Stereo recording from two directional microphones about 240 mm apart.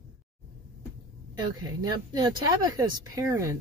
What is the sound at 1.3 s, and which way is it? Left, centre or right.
Speech, centre.